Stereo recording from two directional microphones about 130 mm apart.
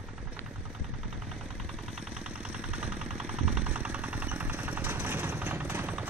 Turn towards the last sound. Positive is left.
turn(degrees=-15)  # may be behind; listen again after turning